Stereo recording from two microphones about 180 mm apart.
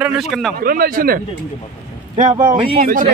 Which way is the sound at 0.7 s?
55° right (ahead or behind).